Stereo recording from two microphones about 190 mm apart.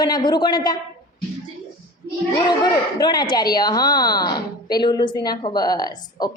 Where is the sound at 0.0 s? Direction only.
25° left (ahead or behind).